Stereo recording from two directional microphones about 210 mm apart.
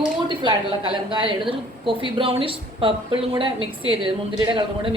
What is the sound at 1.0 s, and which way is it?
A woman's voice, 25° right (ahead or behind).